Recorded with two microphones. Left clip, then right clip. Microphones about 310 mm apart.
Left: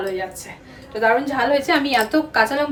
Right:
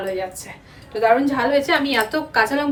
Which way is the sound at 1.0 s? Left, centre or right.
Centre.